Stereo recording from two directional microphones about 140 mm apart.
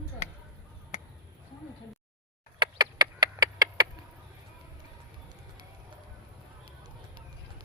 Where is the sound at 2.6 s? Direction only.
30° right (ahead or behind).